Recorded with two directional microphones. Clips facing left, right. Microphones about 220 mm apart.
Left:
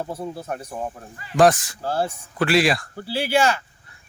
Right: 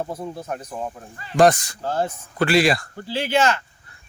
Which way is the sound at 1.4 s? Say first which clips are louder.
Right 1 dB; centre (ahead or behind).